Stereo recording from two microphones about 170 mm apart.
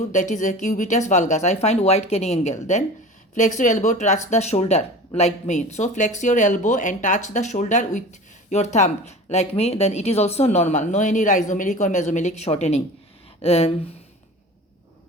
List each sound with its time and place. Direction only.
0.1 s speech: 45° left (ahead or behind)